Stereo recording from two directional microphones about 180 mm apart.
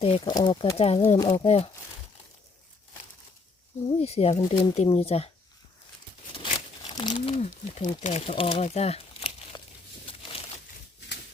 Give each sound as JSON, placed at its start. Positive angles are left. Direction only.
{"t": 0.0, "sound": "speech", "side_deg": 30}
{"t": 1.2, "sound": "speech", "side_deg": 20}
{"t": 1.5, "sound": "speech", "side_deg": 35}
{"t": 3.8, "sound": "speech", "side_deg": 35}
{"t": 6.9, "sound": "speech", "side_deg": 25}
{"t": 10.1, "sound": "a sound", "side_deg": 30}